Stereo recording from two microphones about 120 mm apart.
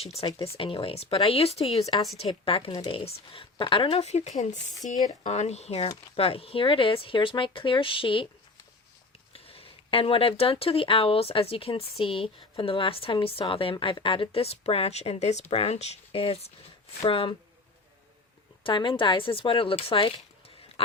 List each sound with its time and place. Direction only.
0.4 s speech: 50° left (ahead or behind)
1.9 s speech: 45° left (ahead or behind)
9.3 s speech: 55° left (ahead or behind)
18.6 s speech: 40° left (ahead or behind)